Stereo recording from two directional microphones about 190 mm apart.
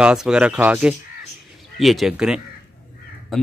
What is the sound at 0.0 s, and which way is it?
Speech, 5° right (ahead or behind).